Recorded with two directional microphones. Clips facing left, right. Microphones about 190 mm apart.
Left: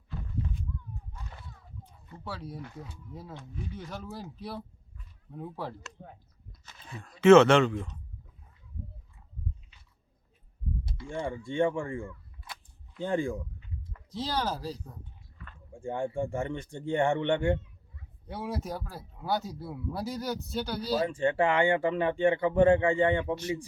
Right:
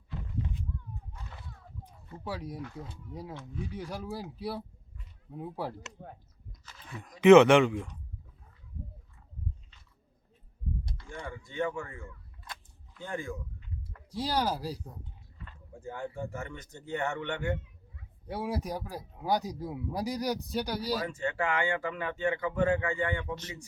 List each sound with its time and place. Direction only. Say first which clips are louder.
2.2 s speech: right 2 dB; 15° right (ahead or behind)
7.0 s speech: even; 15° right (ahead or behind)
11.1 s speech: left 8 dB; 30° left (ahead or behind)
14.1 s speech: right 1 dB; 10° right (ahead or behind)
15.8 s speech: left 6 dB; 30° left (ahead or behind)
18.3 s speech: right 1 dB; 10° right (ahead or behind)
21.1 s speech: left 6 dB; 30° left (ahead or behind)
23.2 s speech: left 8 dB; 10° left (ahead or behind)